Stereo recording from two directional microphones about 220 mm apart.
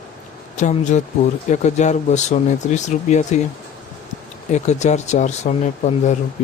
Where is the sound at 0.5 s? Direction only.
35° left (ahead or behind).